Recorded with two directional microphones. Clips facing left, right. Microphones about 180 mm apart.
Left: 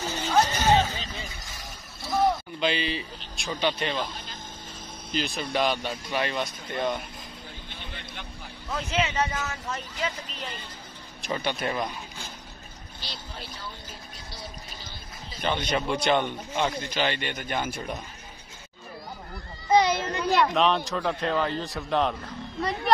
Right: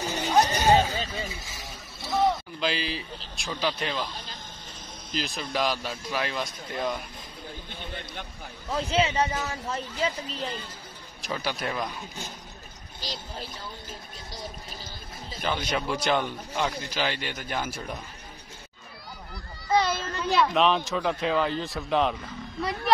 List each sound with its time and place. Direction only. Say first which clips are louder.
0.0 s music: right 1 dB; 15° right (ahead or behind)
0.7 s vehicle: right 1 dB; 10° right (ahead or behind)
3.3 s speech: left 2 dB; centre (ahead or behind)
5.2 s speech: left 2 dB; centre (ahead or behind)
8.7 s speech: right 2 dB; 35° right (ahead or behind)
11.1 s speech: left 2 dB; centre (ahead or behind)
13.0 s speech: right 4 dB; 40° right (ahead or behind)
15.4 s speech: left 2 dB; 5° right (ahead or behind)
19.7 s a child's voice: left 3 dB; 15° left (ahead or behind)
20.3 s speech: right 1 dB; centre (ahead or behind)